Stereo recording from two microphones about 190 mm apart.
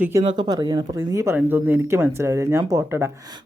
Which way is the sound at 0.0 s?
20° right (ahead or behind).